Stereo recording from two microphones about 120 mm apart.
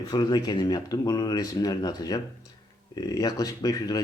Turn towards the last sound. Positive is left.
turn(degrees=30)  # may be behind; listen again after turning